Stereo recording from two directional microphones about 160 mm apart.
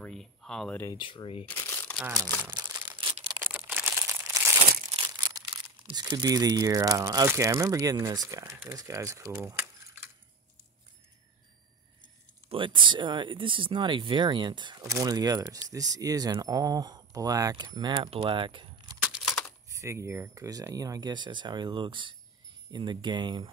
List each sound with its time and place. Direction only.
0.0 s speech: 5° left (ahead or behind)
0.8 s speech: 30° left (ahead or behind)
1.6 s crumpling: 15° left (ahead or behind)
2.0 s speech: 20° right (ahead or behind)
2.4 s crumpling: 20° right (ahead or behind)
3.4 s crumpling: 10° right (ahead or behind); by 6.0 s 25° right (ahead or behind)
6.1 s speech: 20° right (ahead or behind)
12.4 s speech: 30° right (ahead or behind)
19.2 s a sound: 10° left (ahead or behind)
19.7 s speech: 15° right (ahead or behind)